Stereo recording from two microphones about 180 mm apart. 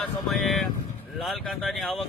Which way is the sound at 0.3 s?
Centre (ahead or behind).